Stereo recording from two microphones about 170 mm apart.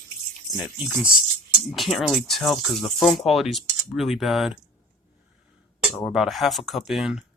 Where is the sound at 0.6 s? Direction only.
5° right (ahead or behind).